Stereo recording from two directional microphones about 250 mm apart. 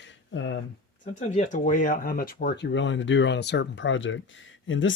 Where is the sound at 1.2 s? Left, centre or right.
Left.